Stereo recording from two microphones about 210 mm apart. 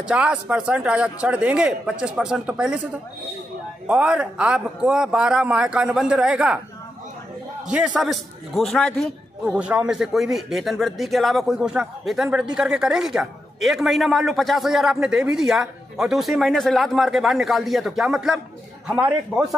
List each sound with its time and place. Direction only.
0.0 s a man's voice: 5° right (ahead or behind)
3.8 s a man's voice: 5° right (ahead or behind)
7.6 s a man's voice: 5° right (ahead or behind)